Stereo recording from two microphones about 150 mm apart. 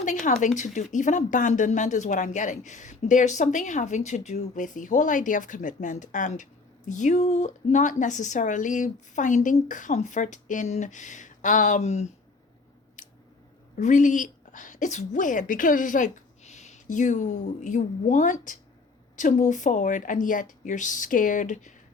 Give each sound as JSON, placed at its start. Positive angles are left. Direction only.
{"t": 0.0, "sound": "speech", "side_deg": 55}
{"t": 13.0, "sound": "scissors", "side_deg": 55}
{"t": 13.7, "sound": "a woman's voice", "side_deg": 55}